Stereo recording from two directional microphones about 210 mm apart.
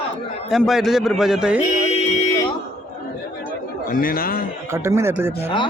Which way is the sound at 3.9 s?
45° left (ahead or behind).